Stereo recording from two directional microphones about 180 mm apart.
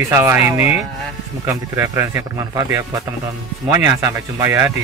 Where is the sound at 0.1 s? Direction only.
15° right (ahead or behind).